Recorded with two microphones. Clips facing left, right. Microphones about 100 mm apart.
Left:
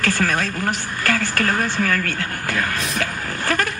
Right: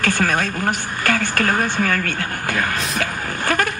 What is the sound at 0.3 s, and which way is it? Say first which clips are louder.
Speech: right 2 dB; 15° right (ahead or behind).